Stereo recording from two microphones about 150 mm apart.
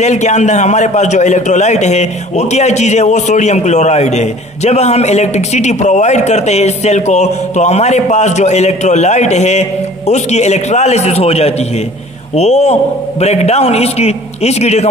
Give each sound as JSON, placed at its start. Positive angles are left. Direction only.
{"t": 0.0, "sound": "a man's voice", "side_deg": 50}